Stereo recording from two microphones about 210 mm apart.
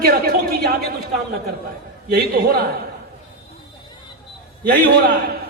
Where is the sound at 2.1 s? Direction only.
45° right (ahead or behind).